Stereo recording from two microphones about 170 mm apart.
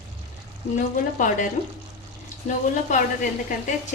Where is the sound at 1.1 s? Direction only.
50° left (ahead or behind).